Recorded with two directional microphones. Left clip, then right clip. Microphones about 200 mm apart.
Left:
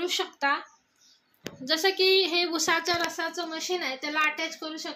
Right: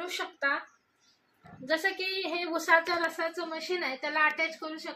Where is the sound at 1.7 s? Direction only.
55° left (ahead or behind).